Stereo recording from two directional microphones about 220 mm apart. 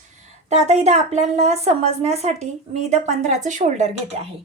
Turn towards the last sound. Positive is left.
turn(degrees=-30)  # may be behind; listen again after turning